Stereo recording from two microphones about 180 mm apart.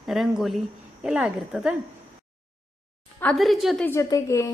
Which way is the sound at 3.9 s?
20° left (ahead or behind).